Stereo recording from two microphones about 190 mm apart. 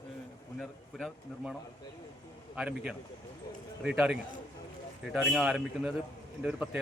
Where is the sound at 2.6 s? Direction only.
5° right (ahead or behind).